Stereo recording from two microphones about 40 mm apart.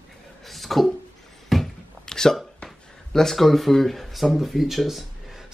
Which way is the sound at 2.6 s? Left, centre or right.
Left.